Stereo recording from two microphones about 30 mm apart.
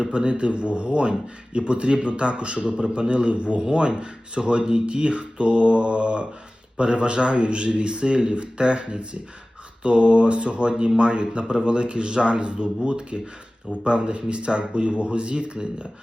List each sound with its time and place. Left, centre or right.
0.1 s speech: right
15.5 s speech: right